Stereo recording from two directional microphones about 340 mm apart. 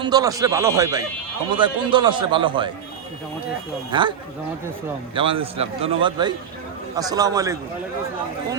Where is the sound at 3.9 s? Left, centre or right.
Centre.